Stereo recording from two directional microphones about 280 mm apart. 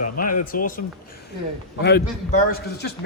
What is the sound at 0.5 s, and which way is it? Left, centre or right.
Speech, left.